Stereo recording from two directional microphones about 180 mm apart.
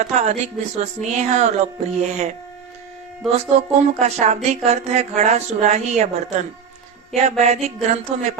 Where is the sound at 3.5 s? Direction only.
40° right (ahead or behind).